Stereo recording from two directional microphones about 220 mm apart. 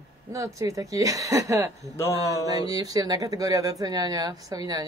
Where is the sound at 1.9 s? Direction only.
15° left (ahead or behind).